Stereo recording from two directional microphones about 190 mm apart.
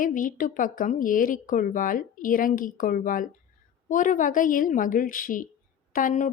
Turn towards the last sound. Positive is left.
turn(degrees=45)  # may be behind; listen again after turning